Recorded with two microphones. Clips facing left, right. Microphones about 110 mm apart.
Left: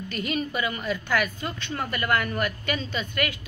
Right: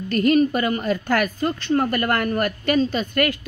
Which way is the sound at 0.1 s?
50° right (ahead or behind).